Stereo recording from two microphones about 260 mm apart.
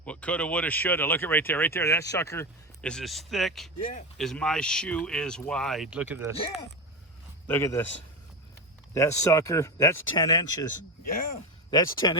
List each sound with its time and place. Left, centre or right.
0.0 s speech: centre
6.3 s speech: centre
7.4 s a man's voice: centre
9.0 s speech: centre
11.7 s speech: centre